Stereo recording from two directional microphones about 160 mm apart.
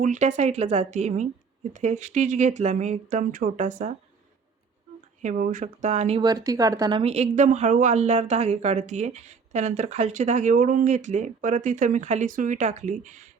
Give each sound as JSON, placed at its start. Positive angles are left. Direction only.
{"t": 0.0, "sound": "speech", "side_deg": -50}
{"t": 5.2, "sound": "speech", "side_deg": -55}
{"t": 6.2, "sound": "speech", "side_deg": -25}
{"t": 7.0, "sound": "speech", "side_deg": -40}